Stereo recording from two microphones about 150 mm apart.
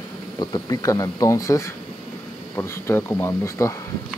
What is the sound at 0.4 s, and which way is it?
Speech, 25° left (ahead or behind).